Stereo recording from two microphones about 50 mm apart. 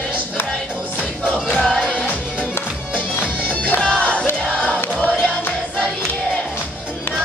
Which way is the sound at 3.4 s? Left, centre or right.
Left.